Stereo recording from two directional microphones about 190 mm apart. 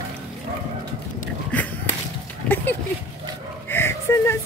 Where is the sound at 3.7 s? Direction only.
10° left (ahead or behind).